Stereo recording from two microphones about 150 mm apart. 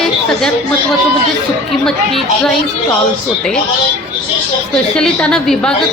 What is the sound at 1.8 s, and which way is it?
Speech, 5° left (ahead or behind).